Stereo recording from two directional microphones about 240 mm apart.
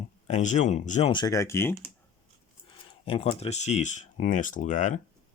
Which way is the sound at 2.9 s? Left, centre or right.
Left.